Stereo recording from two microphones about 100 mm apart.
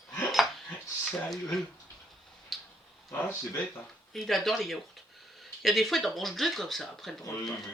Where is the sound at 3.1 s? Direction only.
25° left (ahead or behind).